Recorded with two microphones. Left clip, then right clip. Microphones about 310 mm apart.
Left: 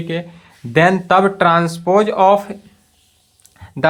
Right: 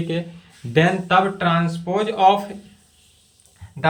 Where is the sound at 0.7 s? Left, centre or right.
Centre.